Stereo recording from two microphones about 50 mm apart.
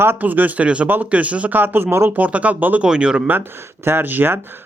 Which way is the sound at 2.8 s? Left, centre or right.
Centre.